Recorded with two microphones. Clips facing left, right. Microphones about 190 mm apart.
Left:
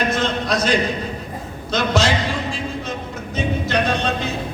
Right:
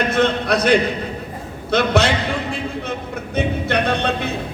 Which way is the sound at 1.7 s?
60° right (ahead or behind).